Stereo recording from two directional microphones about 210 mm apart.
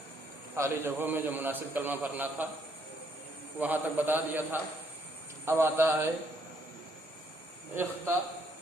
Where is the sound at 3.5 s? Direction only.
10° right (ahead or behind).